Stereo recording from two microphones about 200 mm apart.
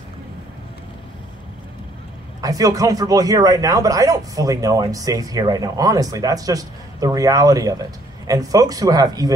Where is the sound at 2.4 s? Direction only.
15° right (ahead or behind).